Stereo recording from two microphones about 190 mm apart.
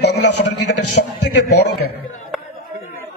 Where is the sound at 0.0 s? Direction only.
60° left (ahead or behind).